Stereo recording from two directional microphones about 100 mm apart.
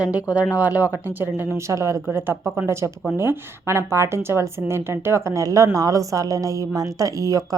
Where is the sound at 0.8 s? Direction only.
30° left (ahead or behind).